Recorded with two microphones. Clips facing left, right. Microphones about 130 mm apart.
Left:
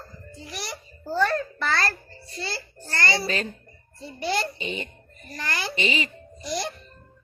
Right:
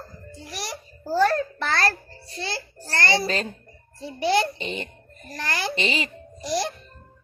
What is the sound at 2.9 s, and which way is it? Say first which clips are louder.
Speech: right 2 dB; 50° right (ahead or behind).